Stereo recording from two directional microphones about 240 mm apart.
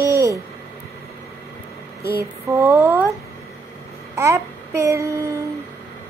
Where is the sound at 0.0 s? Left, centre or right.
Centre.